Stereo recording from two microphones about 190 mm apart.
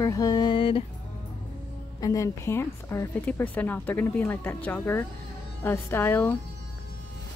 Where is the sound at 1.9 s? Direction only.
15° left (ahead or behind).